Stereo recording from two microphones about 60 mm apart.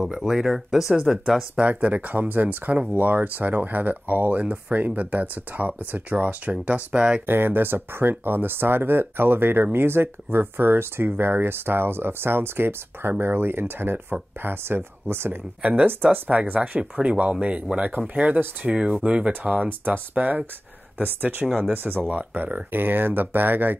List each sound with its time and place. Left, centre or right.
0.0 s speech: centre
1.6 s speech: right
7.2 s speech: right
15.6 s speech: right
15.9 s speech: right
17.0 s speech: centre; by 22.0 s right
22.0 s speech: right